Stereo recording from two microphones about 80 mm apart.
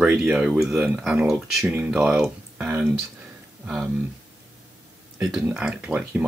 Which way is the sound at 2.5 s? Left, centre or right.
Right.